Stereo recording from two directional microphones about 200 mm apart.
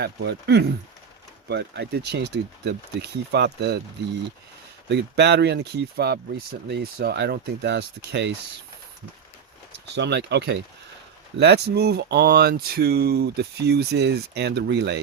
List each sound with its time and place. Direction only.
0.0 s speech: 55° right (ahead or behind)
4.9 s speech: 60° right (ahead or behind)
9.9 s speech: 60° right (ahead or behind)